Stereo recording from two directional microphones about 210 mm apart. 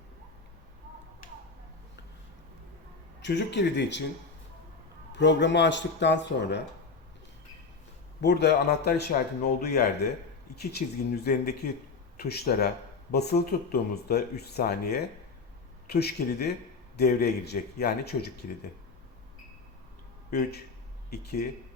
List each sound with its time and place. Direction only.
3.2 s speech: 55° left (ahead or behind)
5.1 s speech: 55° left (ahead or behind)
8.2 s speech: 55° left (ahead or behind)
21.1 s speech: 50° left (ahead or behind)